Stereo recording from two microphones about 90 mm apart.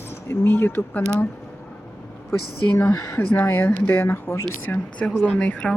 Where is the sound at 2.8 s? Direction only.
25° left (ahead or behind).